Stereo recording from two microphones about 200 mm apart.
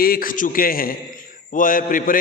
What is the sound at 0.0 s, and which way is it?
A man's voice, 45° left (ahead or behind).